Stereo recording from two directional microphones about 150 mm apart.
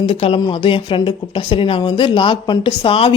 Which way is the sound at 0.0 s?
40° left (ahead or behind).